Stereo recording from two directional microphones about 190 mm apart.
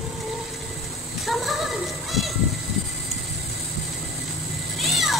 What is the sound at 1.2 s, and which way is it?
Children playing, centre (ahead or behind).